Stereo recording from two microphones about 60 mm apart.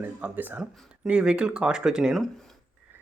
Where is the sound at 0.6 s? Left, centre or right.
Centre.